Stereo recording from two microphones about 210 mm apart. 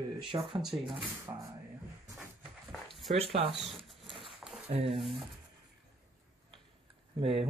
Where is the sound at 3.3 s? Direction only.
25° right (ahead or behind).